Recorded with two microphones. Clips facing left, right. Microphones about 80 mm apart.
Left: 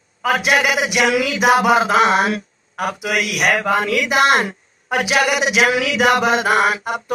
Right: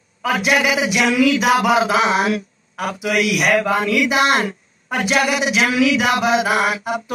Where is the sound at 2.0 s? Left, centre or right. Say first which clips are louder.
Left 1 dB; left.